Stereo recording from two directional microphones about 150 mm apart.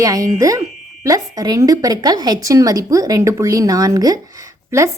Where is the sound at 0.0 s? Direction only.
25° right (ahead or behind).